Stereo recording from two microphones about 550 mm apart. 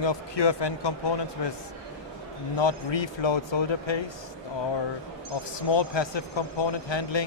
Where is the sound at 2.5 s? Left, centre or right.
Left.